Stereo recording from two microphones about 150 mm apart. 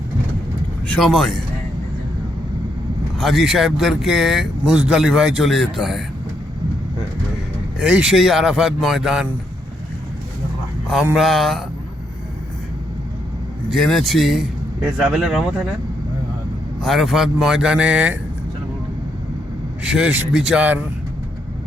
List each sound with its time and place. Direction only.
0.9 s speech: 5° left (ahead or behind)
3.2 s speech: centre (ahead or behind)
7.8 s speech: 5° right (ahead or behind)
11.1 s speech: centre (ahead or behind)
13.7 s speech: centre (ahead or behind)
16.8 s speech: centre (ahead or behind)
19.8 s speech: 5° right (ahead or behind)